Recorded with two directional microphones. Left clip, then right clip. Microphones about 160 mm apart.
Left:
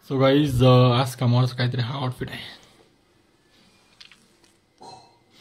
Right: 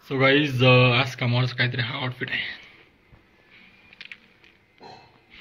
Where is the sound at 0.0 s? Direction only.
35° left (ahead or behind).